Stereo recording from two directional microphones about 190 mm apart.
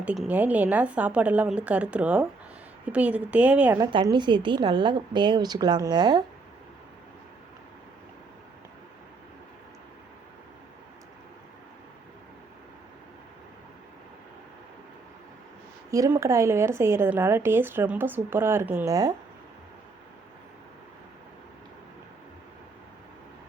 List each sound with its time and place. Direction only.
0.2 s speech: 10° right (ahead or behind)
3.8 s a woman's voice: 20° right (ahead or behind)
15.9 s speech: 15° right (ahead or behind)